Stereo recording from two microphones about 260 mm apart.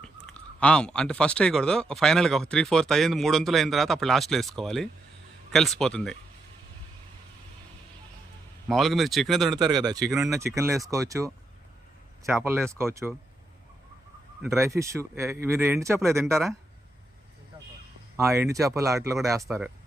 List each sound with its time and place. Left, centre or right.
0.0 s speech: centre
8.7 s speech: centre
9.6 s speech: centre
14.4 s speech: centre
18.2 s speech: centre